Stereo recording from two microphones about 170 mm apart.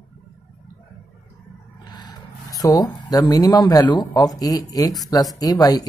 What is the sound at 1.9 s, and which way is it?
Speech, 25° left (ahead or behind).